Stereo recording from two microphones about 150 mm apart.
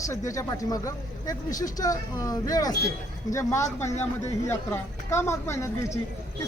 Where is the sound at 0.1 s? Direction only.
20° left (ahead or behind).